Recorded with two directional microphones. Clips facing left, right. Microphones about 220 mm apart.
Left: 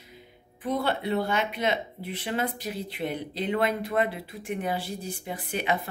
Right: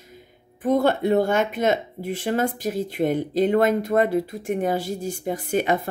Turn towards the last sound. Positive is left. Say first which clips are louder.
# right 7 dB
turn(degrees=-45)  # may be behind; listen again after turning